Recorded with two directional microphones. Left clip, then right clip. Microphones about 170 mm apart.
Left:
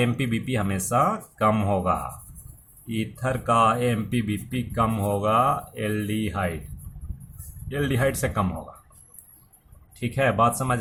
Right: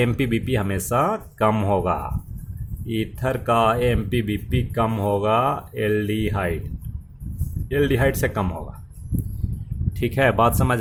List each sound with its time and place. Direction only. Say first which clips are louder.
0.0 s speech: right 4 dB; 35° right (ahead or behind)
7.7 s speech: right 5 dB; 40° right (ahead or behind)
10.0 s speech: right 3 dB; 45° right (ahead or behind)